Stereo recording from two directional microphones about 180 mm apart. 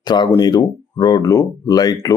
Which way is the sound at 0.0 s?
25° left (ahead or behind).